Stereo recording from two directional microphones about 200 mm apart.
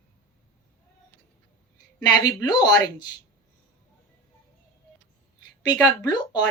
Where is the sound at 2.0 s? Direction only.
20° left (ahead or behind).